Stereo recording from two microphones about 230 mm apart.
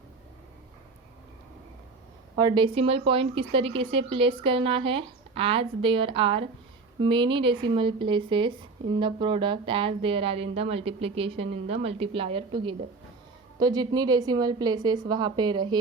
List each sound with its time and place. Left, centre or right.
2.3 s a woman's voice: right